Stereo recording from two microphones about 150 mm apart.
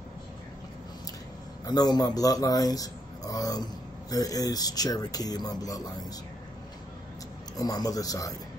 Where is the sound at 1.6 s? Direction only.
25° left (ahead or behind).